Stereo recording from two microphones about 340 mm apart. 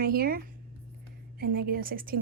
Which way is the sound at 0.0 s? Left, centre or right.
Right.